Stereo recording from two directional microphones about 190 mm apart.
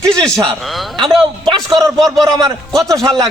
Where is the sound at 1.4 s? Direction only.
25° right (ahead or behind).